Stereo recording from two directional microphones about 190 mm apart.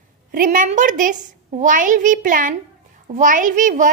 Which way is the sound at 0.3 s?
45° right (ahead or behind).